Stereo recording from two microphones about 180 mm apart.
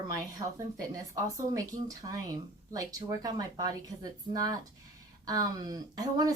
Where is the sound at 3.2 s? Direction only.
20° right (ahead or behind).